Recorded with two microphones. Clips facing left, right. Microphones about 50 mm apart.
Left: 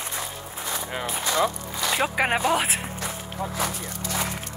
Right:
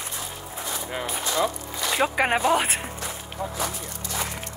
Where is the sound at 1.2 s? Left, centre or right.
Left.